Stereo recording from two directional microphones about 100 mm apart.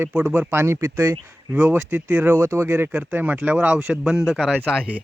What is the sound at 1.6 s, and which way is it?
Speech, 15° right (ahead or behind).